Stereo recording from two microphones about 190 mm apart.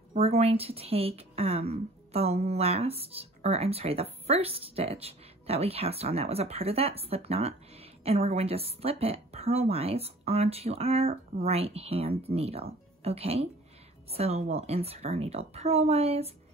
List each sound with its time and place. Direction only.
0.1 s a woman's voice: 35° right (ahead or behind)